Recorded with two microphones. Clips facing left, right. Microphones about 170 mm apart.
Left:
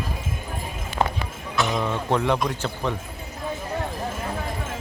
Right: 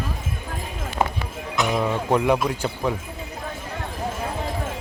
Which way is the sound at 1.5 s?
10° right (ahead or behind).